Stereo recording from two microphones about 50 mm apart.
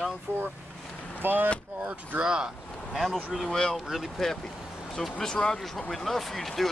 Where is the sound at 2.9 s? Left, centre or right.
Centre.